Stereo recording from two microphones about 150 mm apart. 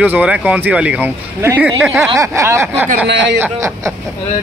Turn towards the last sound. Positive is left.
turn(degrees=-15)  # may be behind; listen again after turning